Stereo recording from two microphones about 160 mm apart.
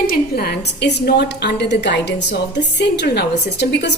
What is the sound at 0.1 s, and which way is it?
A woman's voice, 75° left (ahead or behind).